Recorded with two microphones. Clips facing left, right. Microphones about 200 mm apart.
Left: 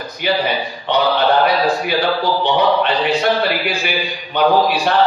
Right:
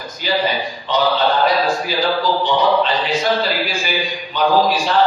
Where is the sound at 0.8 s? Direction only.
65° left (ahead or behind).